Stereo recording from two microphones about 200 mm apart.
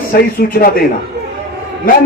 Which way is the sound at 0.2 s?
45° left (ahead or behind).